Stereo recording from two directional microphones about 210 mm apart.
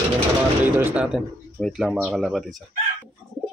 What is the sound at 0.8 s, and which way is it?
Speech, 10° right (ahead or behind).